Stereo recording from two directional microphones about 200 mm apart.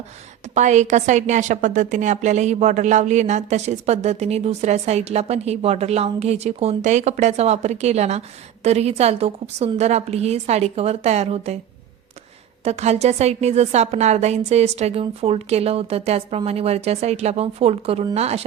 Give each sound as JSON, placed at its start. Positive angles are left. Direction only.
{"t": 0.5, "sound": "a woman's voice", "side_deg": -35}
{"t": 12.6, "sound": "a woman's voice", "side_deg": -35}